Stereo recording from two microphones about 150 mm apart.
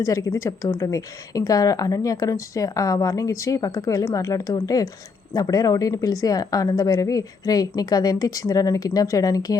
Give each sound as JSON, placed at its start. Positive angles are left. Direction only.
{"t": 0.0, "sound": "speech", "side_deg": 20}